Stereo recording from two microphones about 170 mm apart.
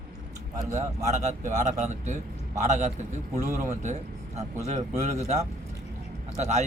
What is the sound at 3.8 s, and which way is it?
Speech, 40° right (ahead or behind).